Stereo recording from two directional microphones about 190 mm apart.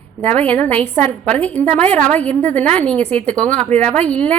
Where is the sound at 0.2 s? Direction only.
5° left (ahead or behind).